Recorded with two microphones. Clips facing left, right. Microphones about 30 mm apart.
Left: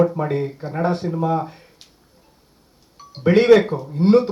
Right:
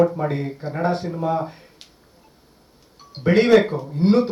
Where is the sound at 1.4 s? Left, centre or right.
Centre.